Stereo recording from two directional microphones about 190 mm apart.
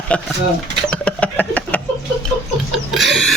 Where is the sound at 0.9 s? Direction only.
5° left (ahead or behind).